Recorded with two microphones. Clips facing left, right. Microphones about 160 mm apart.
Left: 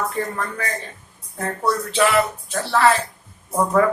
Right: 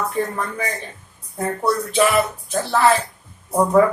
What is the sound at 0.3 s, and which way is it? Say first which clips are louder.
Speech: right 1 dB; 15° right (ahead or behind).